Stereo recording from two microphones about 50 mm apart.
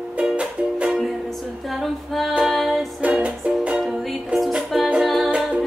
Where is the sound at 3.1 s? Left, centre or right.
Right.